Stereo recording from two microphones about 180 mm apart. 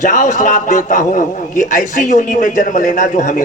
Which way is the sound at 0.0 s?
45° left (ahead or behind).